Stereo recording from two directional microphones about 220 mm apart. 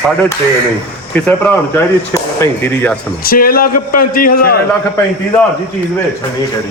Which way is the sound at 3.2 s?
40° left (ahead or behind).